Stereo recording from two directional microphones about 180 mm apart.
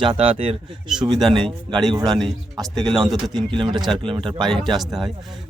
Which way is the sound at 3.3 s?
25° right (ahead or behind).